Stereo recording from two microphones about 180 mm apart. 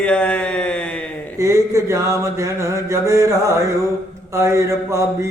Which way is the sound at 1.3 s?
15° right (ahead or behind).